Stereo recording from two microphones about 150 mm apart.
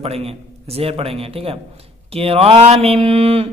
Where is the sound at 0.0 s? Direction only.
40° right (ahead or behind).